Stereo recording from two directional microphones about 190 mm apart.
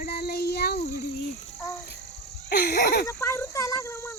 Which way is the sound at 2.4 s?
55° left (ahead or behind).